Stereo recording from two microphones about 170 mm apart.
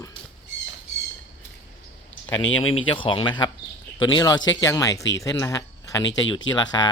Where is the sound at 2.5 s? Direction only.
30° left (ahead or behind).